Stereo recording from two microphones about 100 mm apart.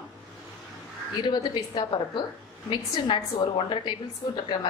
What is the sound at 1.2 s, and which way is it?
A woman's voice, 45° left (ahead or behind).